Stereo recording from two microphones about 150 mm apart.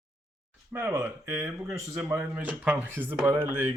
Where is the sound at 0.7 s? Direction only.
15° right (ahead or behind).